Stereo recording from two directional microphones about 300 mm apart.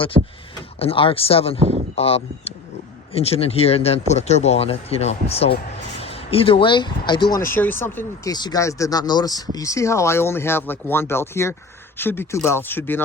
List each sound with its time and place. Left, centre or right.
0.1 s speech: centre
0.8 s speech: centre